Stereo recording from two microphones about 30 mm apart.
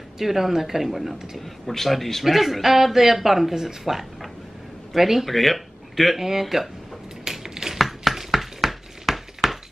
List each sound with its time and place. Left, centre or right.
0.2 s speech: centre
1.4 s speech: centre
2.2 s speech: centre
6.1 s speech: centre
7.2 s a sound: centre
7.7 s a sound: centre